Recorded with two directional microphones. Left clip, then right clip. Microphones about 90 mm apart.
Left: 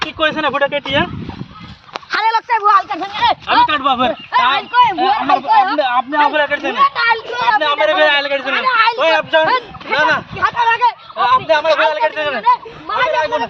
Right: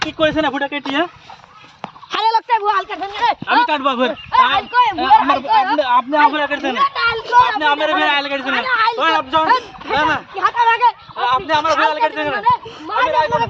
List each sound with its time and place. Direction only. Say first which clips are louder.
0.3 s a man's voice: left 3 dB; 20° right (ahead or behind)
2.0 s a sound: left 1 dB; 75° right (ahead or behind)
3.2 s a man's voice: left 2 dB; 35° right (ahead or behind); by 7.3 s 20° right (ahead or behind)
7.3 s a man's voice: right 5 dB; 30° right (ahead or behind)
9.9 s a man's voice: left 2 dB; 30° right (ahead or behind)